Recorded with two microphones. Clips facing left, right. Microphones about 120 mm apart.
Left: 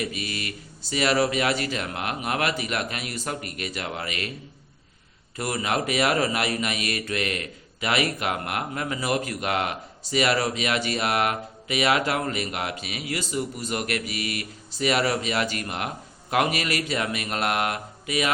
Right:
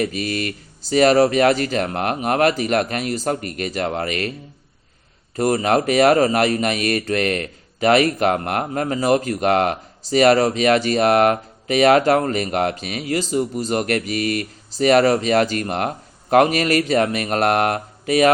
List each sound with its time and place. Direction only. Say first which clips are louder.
0.0 s speech: right 8 dB; 45° right (ahead or behind)
5.4 s speech: right 9 dB; 40° right (ahead or behind)